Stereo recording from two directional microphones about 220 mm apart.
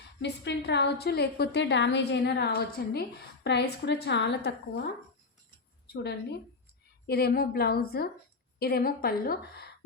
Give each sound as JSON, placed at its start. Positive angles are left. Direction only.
{"t": 0.2, "sound": "a woman's voice", "side_deg": 50}
{"t": 5.9, "sound": "a woman's voice", "side_deg": 50}